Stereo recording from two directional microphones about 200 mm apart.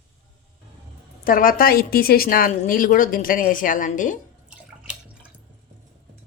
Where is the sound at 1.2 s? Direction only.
45° left (ahead or behind).